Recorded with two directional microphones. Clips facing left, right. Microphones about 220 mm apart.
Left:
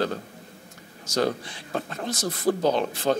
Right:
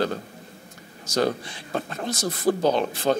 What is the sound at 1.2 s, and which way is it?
Speech, 20° right (ahead or behind).